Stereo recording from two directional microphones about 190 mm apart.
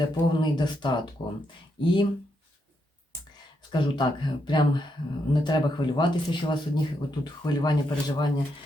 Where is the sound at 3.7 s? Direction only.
25° left (ahead or behind).